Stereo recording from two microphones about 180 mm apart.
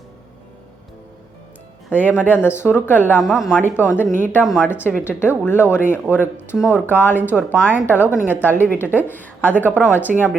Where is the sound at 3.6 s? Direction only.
10° left (ahead or behind).